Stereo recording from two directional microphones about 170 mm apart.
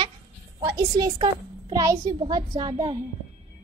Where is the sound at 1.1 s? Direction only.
25° right (ahead or behind).